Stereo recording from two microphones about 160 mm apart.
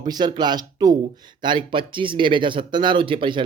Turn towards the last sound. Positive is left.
turn(degrees=-30)  # may be behind; listen again after turning